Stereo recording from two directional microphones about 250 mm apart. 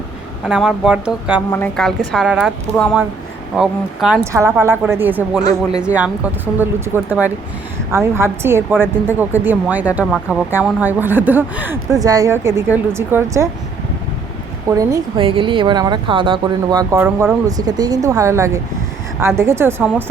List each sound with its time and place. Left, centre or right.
0.4 s a woman's voice: centre
1.5 s a woman's voice: centre
14.7 s a woman's voice: centre